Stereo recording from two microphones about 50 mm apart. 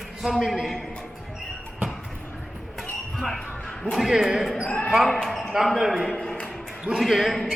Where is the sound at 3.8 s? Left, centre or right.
Centre.